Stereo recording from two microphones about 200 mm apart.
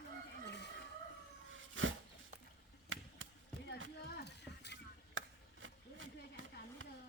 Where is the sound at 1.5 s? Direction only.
75° right (ahead or behind).